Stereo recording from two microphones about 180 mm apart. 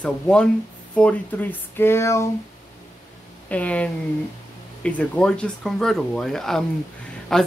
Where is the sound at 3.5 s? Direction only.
5° left (ahead or behind).